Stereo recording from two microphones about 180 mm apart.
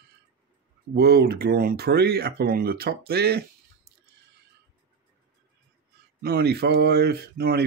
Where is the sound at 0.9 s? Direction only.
60° right (ahead or behind).